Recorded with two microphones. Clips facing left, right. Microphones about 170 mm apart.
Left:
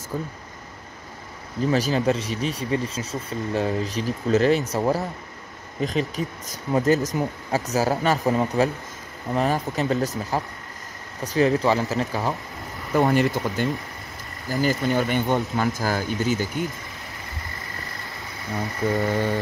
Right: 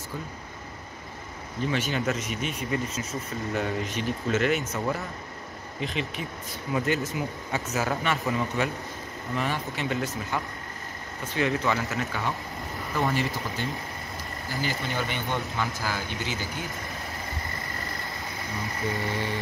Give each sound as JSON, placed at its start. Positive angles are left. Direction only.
{"t": 1.7, "sound": "speech", "side_deg": 35}
{"t": 13.0, "sound": "speech", "side_deg": 55}
{"t": 14.5, "sound": "speech", "side_deg": 45}
{"t": 18.6, "sound": "speech", "side_deg": 45}